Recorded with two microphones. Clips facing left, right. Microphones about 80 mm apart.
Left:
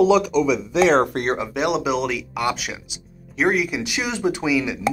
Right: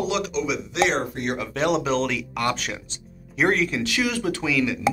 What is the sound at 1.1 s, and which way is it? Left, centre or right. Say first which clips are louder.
Speech: left 5 dB; left.